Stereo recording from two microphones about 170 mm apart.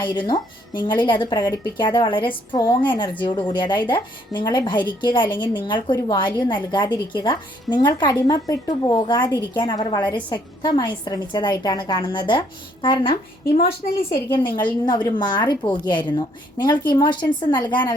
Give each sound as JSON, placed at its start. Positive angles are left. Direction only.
{"t": 0.0, "sound": "speech", "side_deg": 25}
{"t": 14.3, "sound": "speech", "side_deg": 25}